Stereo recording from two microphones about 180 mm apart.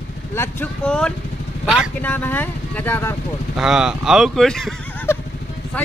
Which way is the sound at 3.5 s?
5° right (ahead or behind).